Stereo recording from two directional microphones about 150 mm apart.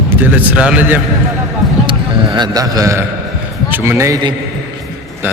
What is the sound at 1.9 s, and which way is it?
Music, 30° right (ahead or behind).